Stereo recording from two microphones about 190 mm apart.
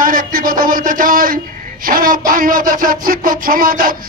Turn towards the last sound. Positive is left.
turn(degrees=-50)  # may be behind; listen again after turning